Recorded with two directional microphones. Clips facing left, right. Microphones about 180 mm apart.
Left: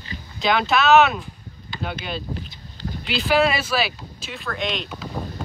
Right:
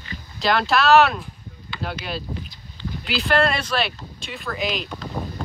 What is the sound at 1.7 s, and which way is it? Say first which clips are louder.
Boat: even; 40° left (ahead or behind).